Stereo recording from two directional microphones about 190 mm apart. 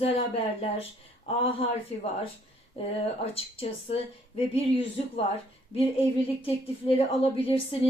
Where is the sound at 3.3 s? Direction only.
30° left (ahead or behind).